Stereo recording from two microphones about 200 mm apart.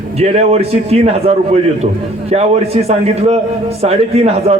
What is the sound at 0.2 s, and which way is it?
A man's voice, 30° right (ahead or behind).